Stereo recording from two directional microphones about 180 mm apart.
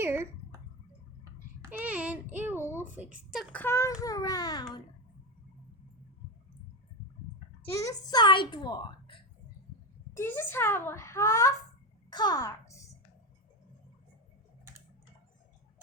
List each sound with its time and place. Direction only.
0.0 s a sound: 15° right (ahead or behind)
1.8 s child singing: 5° right (ahead or behind)
2.8 s a woman's voice: 10° right (ahead or behind)
3.5 s a child's voice: 10° left (ahead or behind)
7.7 s a child's voice: 20° left (ahead or behind)
10.2 s a child's voice: 15° left (ahead or behind)